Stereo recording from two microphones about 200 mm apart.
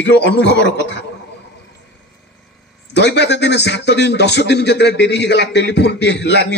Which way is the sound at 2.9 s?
60° left (ahead or behind).